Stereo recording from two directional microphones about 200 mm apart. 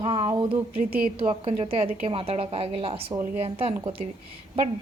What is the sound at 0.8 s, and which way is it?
Speech, 45° right (ahead or behind).